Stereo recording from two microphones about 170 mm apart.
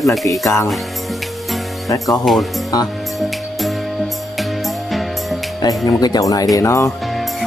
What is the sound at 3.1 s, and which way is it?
Music, centre (ahead or behind).